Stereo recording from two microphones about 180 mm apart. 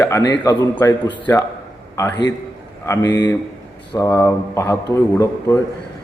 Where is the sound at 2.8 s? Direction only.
20° left (ahead or behind).